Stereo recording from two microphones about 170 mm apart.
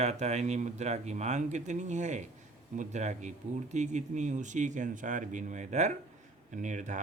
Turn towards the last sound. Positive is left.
turn(degrees=-45)  # may be behind; listen again after turning